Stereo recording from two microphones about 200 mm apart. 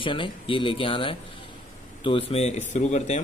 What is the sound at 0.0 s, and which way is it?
Speech, 25° left (ahead or behind).